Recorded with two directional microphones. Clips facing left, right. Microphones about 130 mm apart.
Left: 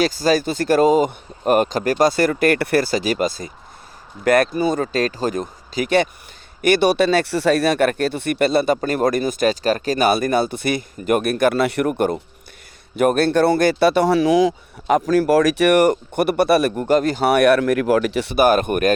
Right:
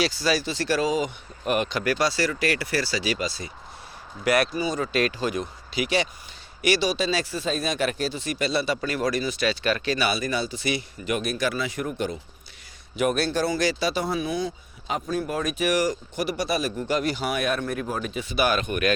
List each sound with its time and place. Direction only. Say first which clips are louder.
0.0 s speech: left 7 dB; 45° left (ahead or behind)
4.9 s speech: left 4 dB; 40° left (ahead or behind); by 18.3 s 75° left (ahead or behind)
18.3 s speech: left 8 dB; 50° left (ahead or behind)